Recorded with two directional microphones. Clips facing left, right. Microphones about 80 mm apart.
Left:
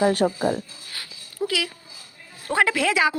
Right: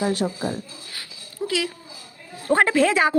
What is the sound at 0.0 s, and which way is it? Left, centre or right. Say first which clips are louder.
Speech: left 4 dB; left.